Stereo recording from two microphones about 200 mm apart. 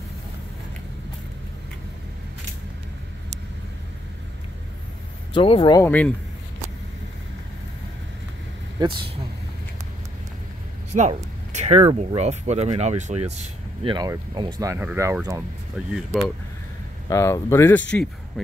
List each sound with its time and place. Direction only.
5.3 s speech: 25° left (ahead or behind)
5.8 s speech: 10° left (ahead or behind)
8.7 s speech: 25° right (ahead or behind)
11.5 s speech: 35° right (ahead or behind); by 15.4 s 15° right (ahead or behind)
15.9 s speech: centre (ahead or behind)
17.1 s speech: 15° left (ahead or behind)